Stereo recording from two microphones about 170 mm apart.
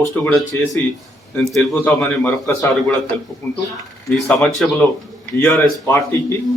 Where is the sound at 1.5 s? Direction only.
5° left (ahead or behind).